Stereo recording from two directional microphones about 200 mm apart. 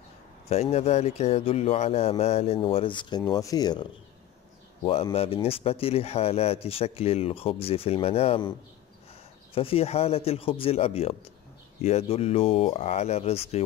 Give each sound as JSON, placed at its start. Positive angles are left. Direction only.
{"t": 0.5, "sound": "speech", "side_deg": 30}